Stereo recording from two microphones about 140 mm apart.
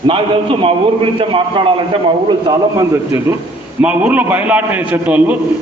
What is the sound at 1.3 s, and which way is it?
Speech, 35° right (ahead or behind).